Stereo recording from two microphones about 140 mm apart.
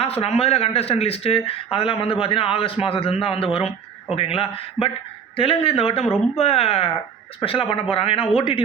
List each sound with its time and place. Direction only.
0.0 s a man's voice: 45° left (ahead or behind)